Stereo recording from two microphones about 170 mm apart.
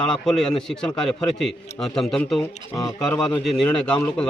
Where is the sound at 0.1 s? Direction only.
5° left (ahead or behind).